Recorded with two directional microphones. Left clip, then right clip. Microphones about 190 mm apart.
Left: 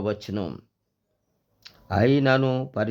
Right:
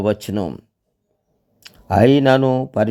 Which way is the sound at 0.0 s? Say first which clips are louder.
Right 8 dB; 35° right (ahead or behind).